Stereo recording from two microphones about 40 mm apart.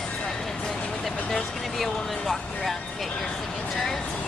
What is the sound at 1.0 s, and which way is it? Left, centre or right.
Vehicle, centre.